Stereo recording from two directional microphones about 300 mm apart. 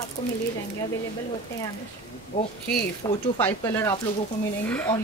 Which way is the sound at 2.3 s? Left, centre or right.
Left.